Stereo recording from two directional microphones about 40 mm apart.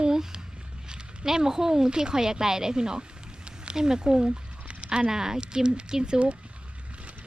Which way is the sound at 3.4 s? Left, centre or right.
Right.